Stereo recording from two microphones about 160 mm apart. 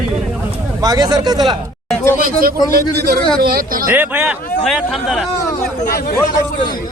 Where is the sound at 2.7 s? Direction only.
75° right (ahead or behind).